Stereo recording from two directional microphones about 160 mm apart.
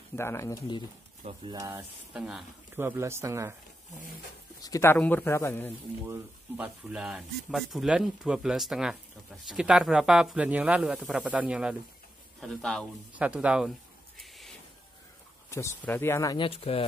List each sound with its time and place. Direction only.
0.1 s a man's voice: 15° left (ahead or behind)
1.2 s speech: 30° right (ahead or behind)
2.1 s speech: centre (ahead or behind)
2.7 s speech: 15° right (ahead or behind)
4.6 s speech: 20° left (ahead or behind)
4.9 s a man's voice: 10° left (ahead or behind)
6.0 s speech: 15° right (ahead or behind); by 12.8 s 5° left (ahead or behind)
13.2 s a sound: 10° right (ahead or behind)
15.8 s a man's voice: 15° left (ahead or behind)
16.3 s speech: 35° left (ahead or behind)